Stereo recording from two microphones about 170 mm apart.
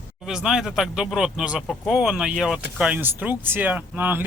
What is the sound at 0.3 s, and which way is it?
Speech, 5° right (ahead or behind).